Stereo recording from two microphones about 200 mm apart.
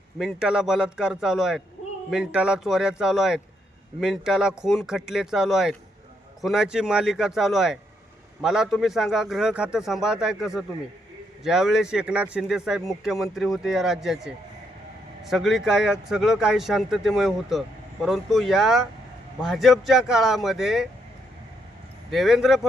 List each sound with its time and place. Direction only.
0.2 s speech: 5° right (ahead or behind)
15.3 s speech: centre (ahead or behind)
22.1 s speech: centre (ahead or behind)